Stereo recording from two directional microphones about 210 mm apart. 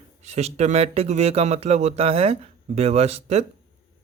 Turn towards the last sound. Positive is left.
turn(degrees=-30)  # may be behind; listen again after turning